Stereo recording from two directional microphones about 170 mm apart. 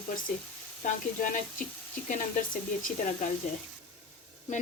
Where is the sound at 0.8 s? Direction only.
50° left (ahead or behind).